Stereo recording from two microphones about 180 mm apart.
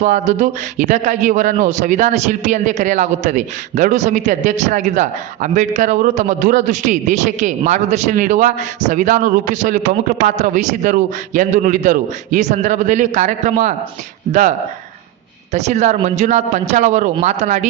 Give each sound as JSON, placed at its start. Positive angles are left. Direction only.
{"t": 0.0, "sound": "a man's voice", "side_deg": -45}
{"t": 15.5, "sound": "a man's voice", "side_deg": -40}